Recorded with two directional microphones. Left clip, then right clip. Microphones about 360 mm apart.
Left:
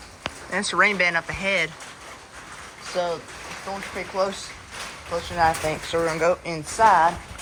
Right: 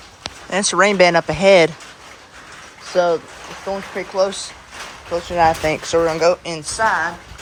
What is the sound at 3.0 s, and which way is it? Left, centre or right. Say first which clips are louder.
Speech: right 10 dB; centre.